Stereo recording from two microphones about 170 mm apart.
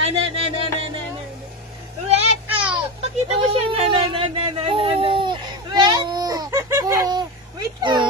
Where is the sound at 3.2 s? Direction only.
35° right (ahead or behind).